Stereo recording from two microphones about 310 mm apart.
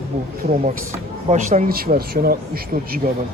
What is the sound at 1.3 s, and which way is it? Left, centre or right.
Speech, right.